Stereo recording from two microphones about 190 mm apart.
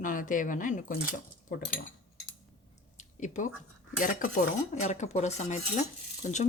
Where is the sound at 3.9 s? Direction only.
40° left (ahead or behind).